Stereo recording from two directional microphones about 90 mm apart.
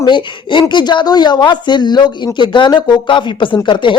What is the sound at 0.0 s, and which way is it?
Speech, 60° left (ahead or behind).